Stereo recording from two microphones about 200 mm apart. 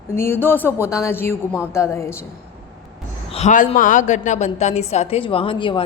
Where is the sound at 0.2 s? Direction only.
10° left (ahead or behind).